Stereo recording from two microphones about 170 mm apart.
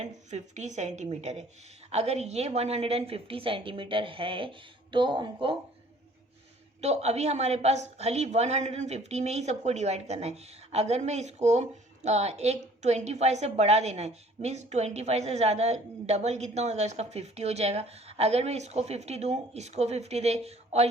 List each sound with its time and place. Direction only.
0.0 s a woman's voice: 45° right (ahead or behind)
6.8 s a woman's voice: 40° right (ahead or behind)